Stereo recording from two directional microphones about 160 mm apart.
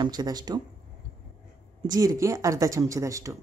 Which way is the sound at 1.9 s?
20° right (ahead or behind).